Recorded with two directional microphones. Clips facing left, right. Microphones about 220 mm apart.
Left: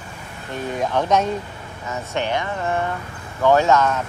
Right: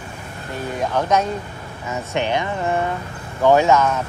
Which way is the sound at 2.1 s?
20° right (ahead or behind).